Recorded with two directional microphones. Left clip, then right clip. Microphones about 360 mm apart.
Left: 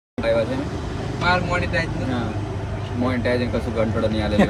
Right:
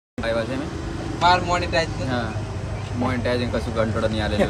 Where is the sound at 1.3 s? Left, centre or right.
Centre.